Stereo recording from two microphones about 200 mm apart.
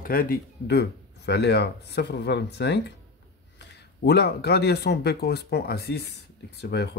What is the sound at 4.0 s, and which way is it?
Speech, 55° left (ahead or behind).